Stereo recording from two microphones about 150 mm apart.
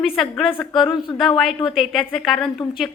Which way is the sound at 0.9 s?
35° left (ahead or behind).